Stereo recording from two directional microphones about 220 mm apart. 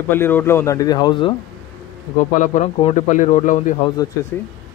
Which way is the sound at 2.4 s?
35° left (ahead or behind).